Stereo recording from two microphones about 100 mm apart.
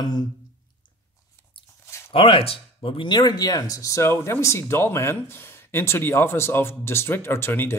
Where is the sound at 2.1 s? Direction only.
70° left (ahead or behind).